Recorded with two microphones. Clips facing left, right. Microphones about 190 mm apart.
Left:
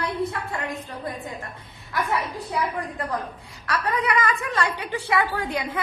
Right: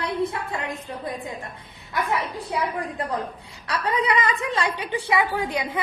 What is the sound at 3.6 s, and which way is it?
A woman's voice, 25° right (ahead or behind).